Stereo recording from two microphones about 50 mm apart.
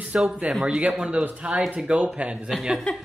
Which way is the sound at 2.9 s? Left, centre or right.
Left.